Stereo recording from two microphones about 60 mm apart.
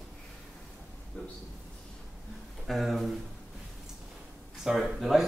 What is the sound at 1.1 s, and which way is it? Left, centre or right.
Speech, centre.